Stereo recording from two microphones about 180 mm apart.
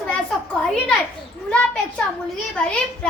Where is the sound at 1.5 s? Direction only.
5° left (ahead or behind).